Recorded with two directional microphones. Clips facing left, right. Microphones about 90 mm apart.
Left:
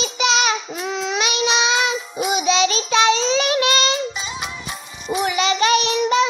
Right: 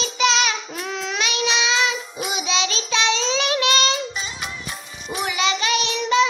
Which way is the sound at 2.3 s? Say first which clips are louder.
Left 6 dB; 45° left (ahead or behind).